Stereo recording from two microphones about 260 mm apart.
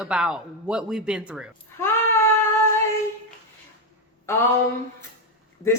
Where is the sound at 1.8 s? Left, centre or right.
Centre.